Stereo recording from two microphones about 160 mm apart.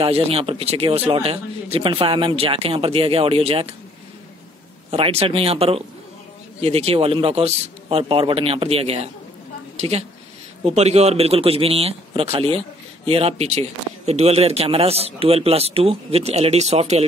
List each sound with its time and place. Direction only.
0.0 s speech: 35° right (ahead or behind)
4.9 s a woman's voice: 35° right (ahead or behind)